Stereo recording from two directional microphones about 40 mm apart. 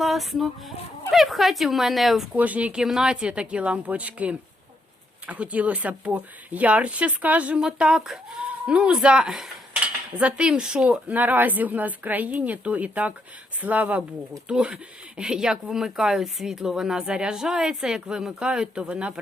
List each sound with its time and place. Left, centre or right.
0.0 s speech: centre
2.3 s speech: right
2.8 s speech: centre
3.1 s speech: right
7.8 s speech: right
8.0 s speech: centre
8.6 s speech: right
9.8 s cutlery: right
11.1 s a woman's voice: right
14.4 s speech: right